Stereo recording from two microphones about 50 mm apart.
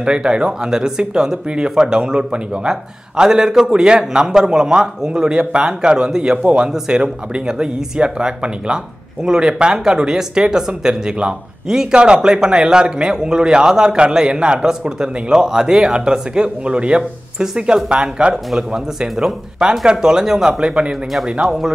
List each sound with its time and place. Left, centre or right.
0.0 s speech: centre